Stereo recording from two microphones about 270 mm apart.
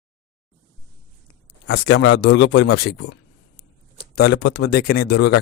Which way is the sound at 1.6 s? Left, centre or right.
Left.